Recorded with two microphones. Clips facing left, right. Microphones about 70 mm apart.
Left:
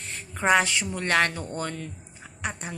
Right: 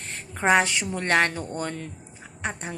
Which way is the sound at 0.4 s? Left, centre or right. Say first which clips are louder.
Right 1 dB; right.